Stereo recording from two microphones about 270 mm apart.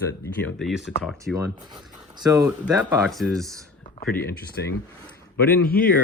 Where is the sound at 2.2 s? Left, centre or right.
Centre.